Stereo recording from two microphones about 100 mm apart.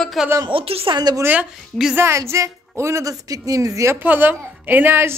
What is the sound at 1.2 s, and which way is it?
Speech, 15° right (ahead or behind).